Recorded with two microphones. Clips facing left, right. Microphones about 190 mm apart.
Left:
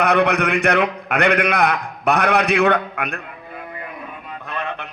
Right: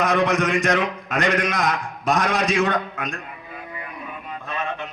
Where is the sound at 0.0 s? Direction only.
65° left (ahead or behind).